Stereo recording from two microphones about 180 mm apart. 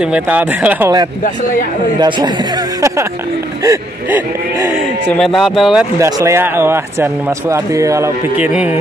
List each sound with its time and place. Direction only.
0.0 s speech: 5° right (ahead or behind)
2.0 s speech: 25° right (ahead or behind)
5.0 s speech: 5° left (ahead or behind)
5.9 s speech: 15° right (ahead or behind)